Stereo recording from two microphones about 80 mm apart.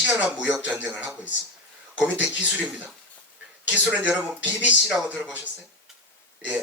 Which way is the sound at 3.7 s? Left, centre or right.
Centre.